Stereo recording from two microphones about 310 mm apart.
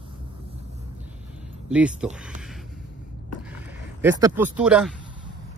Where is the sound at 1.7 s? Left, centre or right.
Centre.